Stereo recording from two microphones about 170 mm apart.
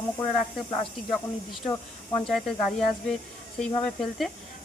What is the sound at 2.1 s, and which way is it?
A woman's voice, centre (ahead or behind).